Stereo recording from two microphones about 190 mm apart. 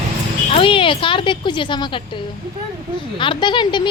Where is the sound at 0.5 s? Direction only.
25° left (ahead or behind).